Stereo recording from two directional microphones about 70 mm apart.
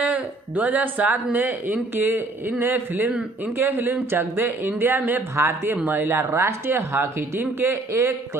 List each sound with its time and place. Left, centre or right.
0.0 s speech: right